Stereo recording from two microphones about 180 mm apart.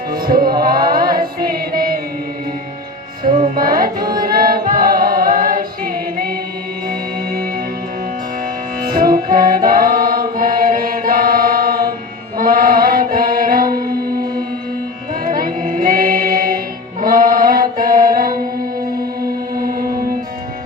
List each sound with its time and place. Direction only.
0.1 s music: 55° right (ahead or behind)
3.5 s music: 50° right (ahead or behind)
4.2 s choir: 55° right (ahead or behind)
9.0 s music: 50° right (ahead or behind)
12.4 s mantra: 50° right (ahead or behind)
15.2 s music: 50° right (ahead or behind)
17.0 s mantra: 50° right (ahead or behind)
19.5 s music: 50° right (ahead or behind)